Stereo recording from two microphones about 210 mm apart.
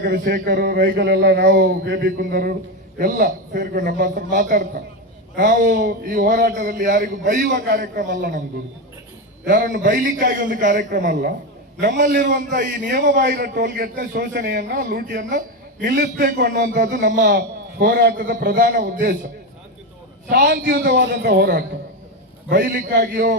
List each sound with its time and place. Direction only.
0.0 s a man's voice: 50° right (ahead or behind)
9.5 s a man's voice: 40° right (ahead or behind)
20.3 s a man's voice: 50° right (ahead or behind)